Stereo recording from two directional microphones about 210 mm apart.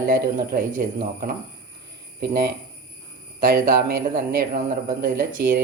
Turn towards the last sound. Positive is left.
turn(degrees=-40)  # may be behind; listen again after turning